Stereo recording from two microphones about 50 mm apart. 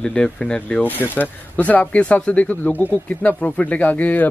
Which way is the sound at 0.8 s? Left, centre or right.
Left.